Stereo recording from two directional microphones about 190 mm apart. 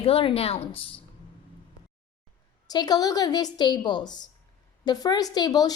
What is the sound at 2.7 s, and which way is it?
A woman's voice, 20° left (ahead or behind).